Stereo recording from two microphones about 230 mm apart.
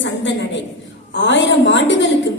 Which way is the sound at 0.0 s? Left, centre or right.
Left.